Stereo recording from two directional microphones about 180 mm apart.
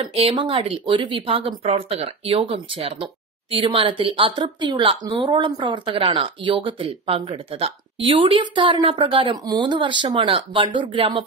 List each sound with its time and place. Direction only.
0.1 s speech: 35° right (ahead or behind)